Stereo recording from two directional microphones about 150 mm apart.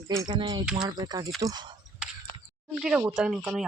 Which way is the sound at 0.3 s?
30° right (ahead or behind).